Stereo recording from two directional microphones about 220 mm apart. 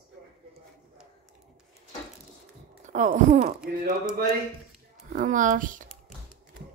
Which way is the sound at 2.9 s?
35° right (ahead or behind).